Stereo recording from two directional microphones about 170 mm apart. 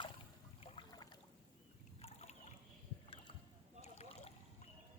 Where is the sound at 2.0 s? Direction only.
35° left (ahead or behind).